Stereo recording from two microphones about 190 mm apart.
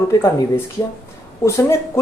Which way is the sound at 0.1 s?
15° left (ahead or behind).